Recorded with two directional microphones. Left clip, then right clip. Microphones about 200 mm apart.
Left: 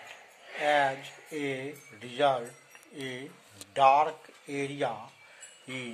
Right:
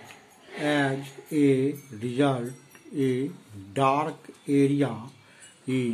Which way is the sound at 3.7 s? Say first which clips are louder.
Left 2 dB; 30° right (ahead or behind).